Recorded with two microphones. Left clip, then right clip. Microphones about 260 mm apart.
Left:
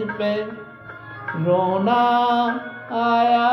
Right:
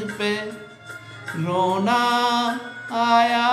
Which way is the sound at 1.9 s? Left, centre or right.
Right.